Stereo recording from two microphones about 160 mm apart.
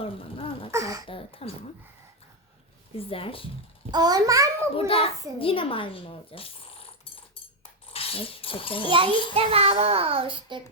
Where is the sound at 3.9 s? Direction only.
25° right (ahead or behind).